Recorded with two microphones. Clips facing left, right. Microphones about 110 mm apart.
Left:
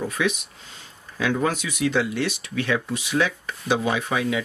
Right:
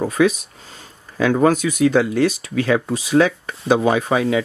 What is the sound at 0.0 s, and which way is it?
Speech, 40° right (ahead or behind).